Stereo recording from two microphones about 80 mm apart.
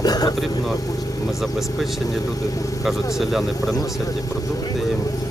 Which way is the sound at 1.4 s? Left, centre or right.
Centre.